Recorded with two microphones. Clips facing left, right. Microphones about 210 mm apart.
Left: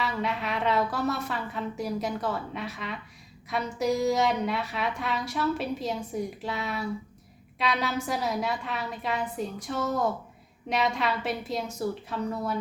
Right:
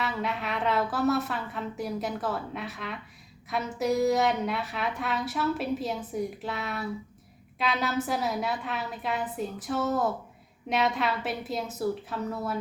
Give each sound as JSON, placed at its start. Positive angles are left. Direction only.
{"t": 0.0, "sound": "a woman's voice", "side_deg": 0}